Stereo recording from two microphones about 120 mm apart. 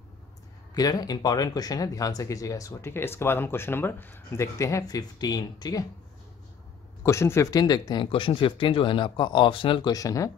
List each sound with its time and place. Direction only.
0.7 s speech: 30° left (ahead or behind)
7.0 s speech: 20° left (ahead or behind)
7.6 s speech: 35° left (ahead or behind)